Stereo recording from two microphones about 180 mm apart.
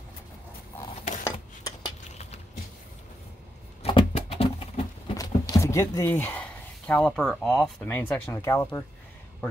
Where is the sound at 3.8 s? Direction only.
35° left (ahead or behind).